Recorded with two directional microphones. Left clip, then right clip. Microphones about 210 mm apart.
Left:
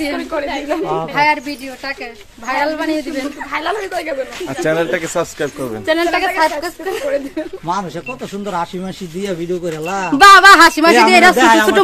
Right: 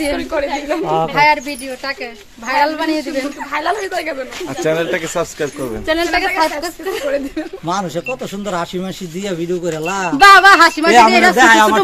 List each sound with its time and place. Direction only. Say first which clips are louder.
0.0 s a man's voice: right 2 dB; 10° right (ahead or behind)
2.4 s a man's voice: right 2 dB; 5° right (ahead or behind)
4.6 s speech: left 1 dB; 10° left (ahead or behind)
7.6 s speech: right 2 dB; 35° right (ahead or behind)
10.1 s speech: left 1 dB; 50° left (ahead or behind)
11.3 s speech: right 1 dB; 30° right (ahead or behind)